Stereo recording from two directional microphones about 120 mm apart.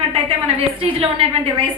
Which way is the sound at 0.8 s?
55° right (ahead or behind).